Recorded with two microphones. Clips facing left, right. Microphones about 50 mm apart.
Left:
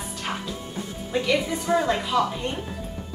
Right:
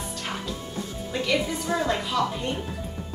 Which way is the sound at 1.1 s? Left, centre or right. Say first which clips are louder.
Left 2 dB; centre.